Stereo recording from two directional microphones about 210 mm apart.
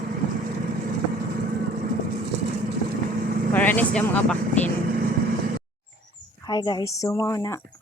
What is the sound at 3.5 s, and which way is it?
Speech, 10° left (ahead or behind).